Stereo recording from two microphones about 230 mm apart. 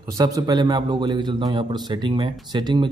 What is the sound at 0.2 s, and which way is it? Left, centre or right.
A man's voice, centre.